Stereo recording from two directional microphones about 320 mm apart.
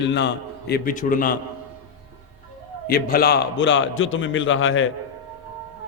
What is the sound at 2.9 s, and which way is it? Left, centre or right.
A man's voice, left.